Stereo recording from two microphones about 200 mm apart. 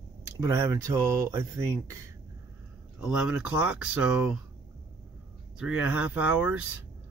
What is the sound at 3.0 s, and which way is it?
Speech, 5° right (ahead or behind).